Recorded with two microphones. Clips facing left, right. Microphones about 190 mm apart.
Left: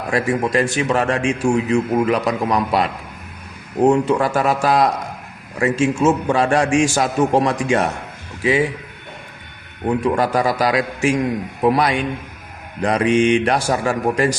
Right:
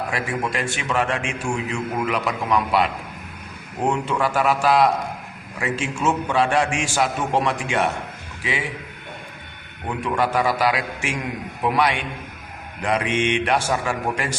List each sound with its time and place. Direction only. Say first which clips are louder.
0.1 s a man's voice: left 7 dB; 40° left (ahead or behind)
10.2 s a man's voice: left 3 dB; 40° left (ahead or behind)